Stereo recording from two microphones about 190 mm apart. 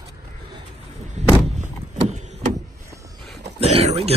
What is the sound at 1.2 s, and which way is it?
Vehicle, 35° right (ahead or behind).